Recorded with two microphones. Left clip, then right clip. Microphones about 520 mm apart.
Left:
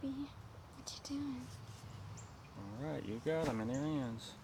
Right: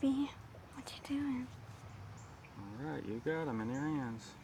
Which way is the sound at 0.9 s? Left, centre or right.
Centre.